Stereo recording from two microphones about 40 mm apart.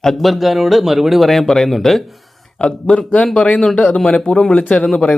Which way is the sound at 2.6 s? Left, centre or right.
Left.